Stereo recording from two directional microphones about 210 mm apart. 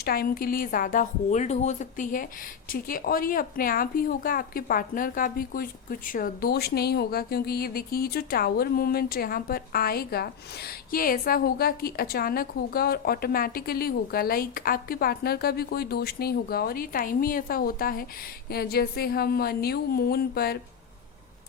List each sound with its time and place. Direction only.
0.0 s speech: 45° left (ahead or behind)